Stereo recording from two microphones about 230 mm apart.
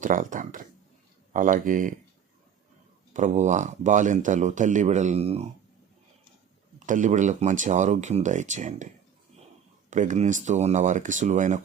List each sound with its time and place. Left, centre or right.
0.0 s speech: right
3.1 s speech: right
6.7 s speech: right
9.9 s speech: right